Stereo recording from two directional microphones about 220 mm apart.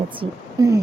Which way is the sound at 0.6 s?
15° right (ahead or behind).